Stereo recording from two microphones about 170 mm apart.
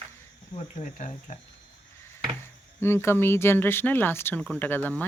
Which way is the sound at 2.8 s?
15° left (ahead or behind).